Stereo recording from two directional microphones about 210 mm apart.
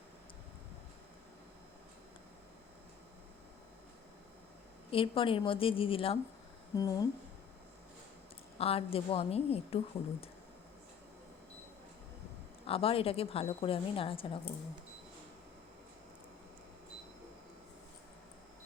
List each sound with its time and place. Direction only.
4.9 s a woman's voice: 25° left (ahead or behind)
8.5 s a woman's voice: 30° left (ahead or behind)
12.6 s a woman's voice: 25° left (ahead or behind)